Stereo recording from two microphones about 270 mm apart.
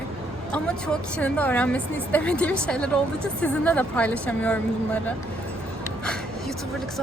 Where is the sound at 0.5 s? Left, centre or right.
Centre.